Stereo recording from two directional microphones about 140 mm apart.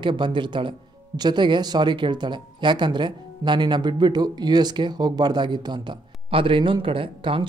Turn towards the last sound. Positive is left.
turn(degrees=-40)  # may be behind; listen again after turning